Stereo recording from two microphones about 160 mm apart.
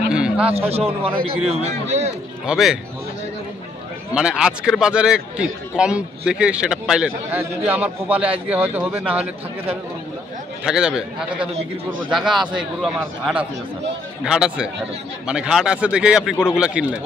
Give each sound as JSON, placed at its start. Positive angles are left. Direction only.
{"t": 0.1, "sound": "a sound", "side_deg": -5}
{"t": 0.5, "sound": "a man's voice", "side_deg": -40}
{"t": 2.4, "sound": "a man's voice", "side_deg": -5}
{"t": 4.1, "sound": "a man's voice", "side_deg": -5}